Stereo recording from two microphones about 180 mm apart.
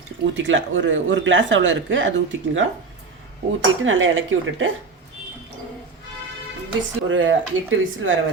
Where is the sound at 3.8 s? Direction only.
90° right.